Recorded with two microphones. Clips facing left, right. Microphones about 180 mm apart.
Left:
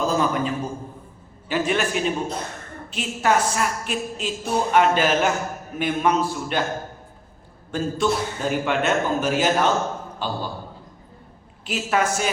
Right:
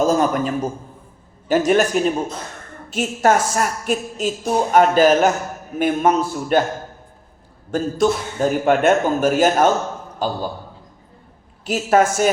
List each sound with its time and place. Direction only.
0.0 s a woman's voice: 45° right (ahead or behind)
7.7 s a woman's voice: 45° right (ahead or behind)
11.6 s a woman's voice: 45° right (ahead or behind)